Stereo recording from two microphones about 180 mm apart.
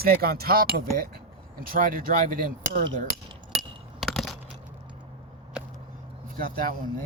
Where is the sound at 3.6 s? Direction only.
Centre (ahead or behind).